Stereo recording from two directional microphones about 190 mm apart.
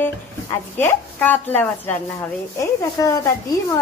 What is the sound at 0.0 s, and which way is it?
Speech, 10° left (ahead or behind).